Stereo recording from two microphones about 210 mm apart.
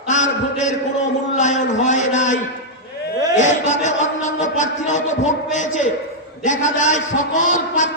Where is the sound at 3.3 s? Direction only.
35° left (ahead or behind).